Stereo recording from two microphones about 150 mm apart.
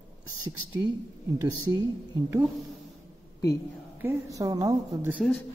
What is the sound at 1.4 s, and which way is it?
A woman's voice, 25° right (ahead or behind).